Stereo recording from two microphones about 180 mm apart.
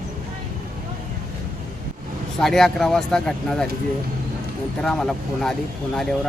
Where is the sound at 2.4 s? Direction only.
Centre (ahead or behind).